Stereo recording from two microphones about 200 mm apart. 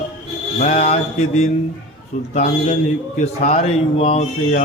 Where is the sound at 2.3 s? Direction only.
35° left (ahead or behind).